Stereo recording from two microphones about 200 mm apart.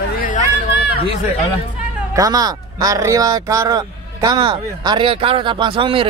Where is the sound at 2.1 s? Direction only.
20° right (ahead or behind).